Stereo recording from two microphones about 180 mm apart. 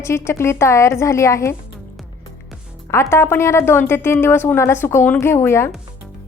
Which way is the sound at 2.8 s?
15° left (ahead or behind).